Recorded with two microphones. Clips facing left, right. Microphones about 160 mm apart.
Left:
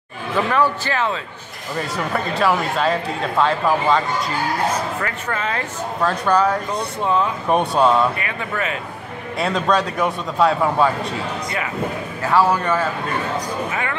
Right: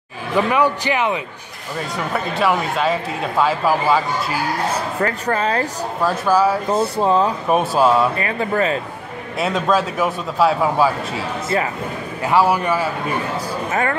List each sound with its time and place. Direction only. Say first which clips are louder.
0.5 s a man's voice: even; 15° right (ahead or behind)
1.8 s speech: even; centre (ahead or behind)
5.0 s speech: right 5 dB; 35° right (ahead or behind)
6.0 s speech: right 1 dB; 5° right (ahead or behind)
7.0 s speech: right 2 dB; 35° right (ahead or behind)
7.4 s speech: left 2 dB; 5° right (ahead or behind)
8.2 s speech: right 6 dB; 35° right (ahead or behind)
9.4 s speech: right 1 dB; 5° right (ahead or behind)
12.2 s a man's voice: right 1 dB; 15° right (ahead or behind)
13.7 s speech: right 5 dB; 45° right (ahead or behind)